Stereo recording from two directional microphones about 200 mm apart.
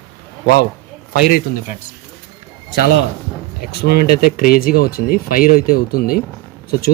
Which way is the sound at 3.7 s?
50° left (ahead or behind).